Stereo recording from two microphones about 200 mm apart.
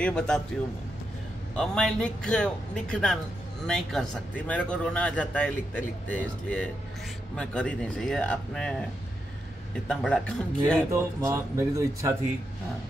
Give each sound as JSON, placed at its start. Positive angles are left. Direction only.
{"t": 0.0, "sound": "a man's voice", "side_deg": 5}
{"t": 1.6, "sound": "a man's voice", "side_deg": 5}
{"t": 9.8, "sound": "a man's voice", "side_deg": 5}
{"t": 10.9, "sound": "speech", "side_deg": -15}